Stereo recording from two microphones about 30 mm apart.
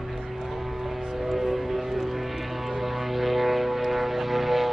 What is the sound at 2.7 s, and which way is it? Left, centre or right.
Vehicle, centre.